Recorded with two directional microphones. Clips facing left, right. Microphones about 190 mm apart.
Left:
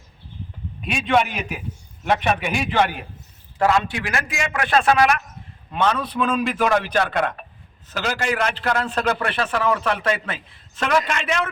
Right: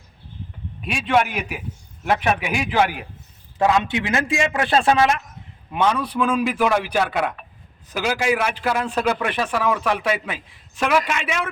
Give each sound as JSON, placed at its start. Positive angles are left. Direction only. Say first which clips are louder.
{"t": 0.9, "sound": "a man's voice", "louder": "even", "side_deg": 0}
{"t": 3.6, "sound": "a man's voice", "louder": "right 1 dB", "side_deg": -20}
{"t": 5.7, "sound": "a man's voice", "louder": "right 1 dB", "side_deg": -10}